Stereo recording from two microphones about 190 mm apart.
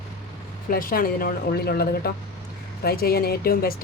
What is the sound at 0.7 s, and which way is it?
Speech, 50° left (ahead or behind).